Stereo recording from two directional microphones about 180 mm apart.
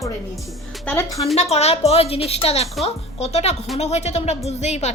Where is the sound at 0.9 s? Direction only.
15° left (ahead or behind).